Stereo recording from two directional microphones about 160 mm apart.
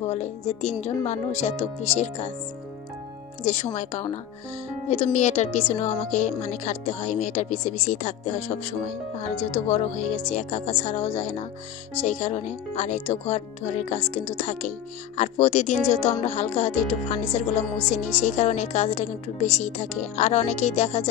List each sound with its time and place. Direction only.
0.0 s speech: 40° left (ahead or behind)
3.4 s speech: 45° left (ahead or behind)